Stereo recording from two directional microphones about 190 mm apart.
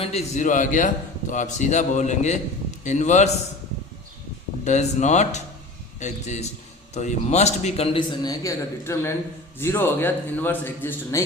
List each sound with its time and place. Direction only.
0.0 s a man's voice: 35° left (ahead or behind)
4.6 s a man's voice: 40° left (ahead or behind); by 11.2 s 10° left (ahead or behind)